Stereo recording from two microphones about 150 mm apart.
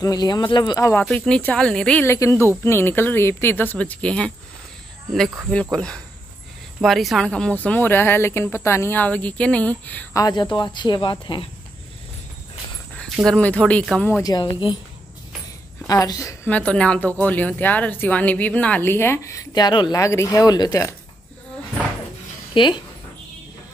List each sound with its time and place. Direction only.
0.0 s speech: 25° left (ahead or behind)
1.0 s a woman's voice: 5° left (ahead or behind)
10.1 s speech: 25° left (ahead or behind)
13.0 s a woman's voice: centre (ahead or behind)
14.2 s speech: 25° left (ahead or behind)
15.9 s speech: 20° left (ahead or behind)
16.4 s a woman's voice: 10° left (ahead or behind); by 20.9 s 25° left (ahead or behind)
22.5 s speech: 35° left (ahead or behind)